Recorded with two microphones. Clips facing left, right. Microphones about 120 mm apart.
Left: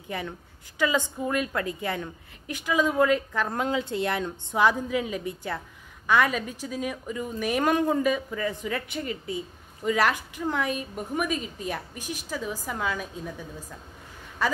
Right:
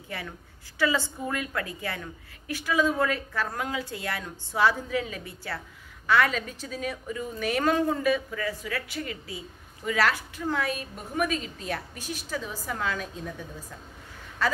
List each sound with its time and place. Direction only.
0.7 s a woman's voice: 20° left (ahead or behind)
14.4 s a woman's voice: 15° left (ahead or behind)